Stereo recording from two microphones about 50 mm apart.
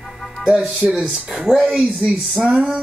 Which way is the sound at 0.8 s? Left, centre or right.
Right.